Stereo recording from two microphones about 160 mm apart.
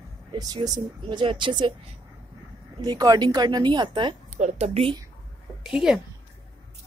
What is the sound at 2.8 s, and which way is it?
Speech, 25° right (ahead or behind).